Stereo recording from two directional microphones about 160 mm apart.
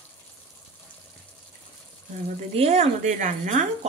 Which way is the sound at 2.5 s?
40° right (ahead or behind).